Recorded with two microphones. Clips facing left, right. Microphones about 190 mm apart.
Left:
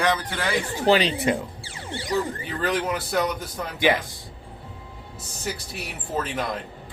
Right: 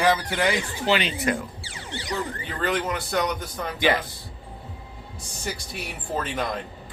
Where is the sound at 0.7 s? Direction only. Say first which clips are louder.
Left 4 dB; 40° left (ahead or behind).